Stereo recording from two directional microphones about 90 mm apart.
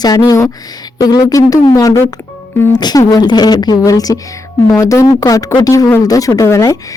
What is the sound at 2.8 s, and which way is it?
Speech, 50° left (ahead or behind).